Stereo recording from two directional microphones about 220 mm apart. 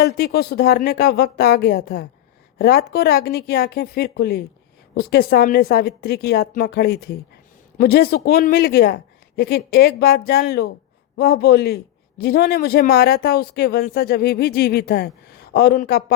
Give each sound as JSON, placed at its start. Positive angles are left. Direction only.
{"t": 0.0, "sound": "a man's voice", "side_deg": 45}